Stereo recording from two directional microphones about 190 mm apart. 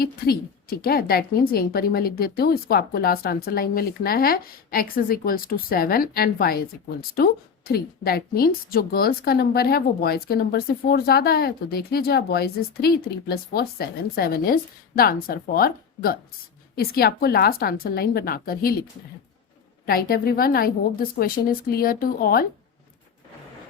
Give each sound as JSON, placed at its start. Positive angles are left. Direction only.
{"t": 0.0, "sound": "a woman's voice", "side_deg": 55}
{"t": 19.8, "sound": "a woman's voice", "side_deg": 50}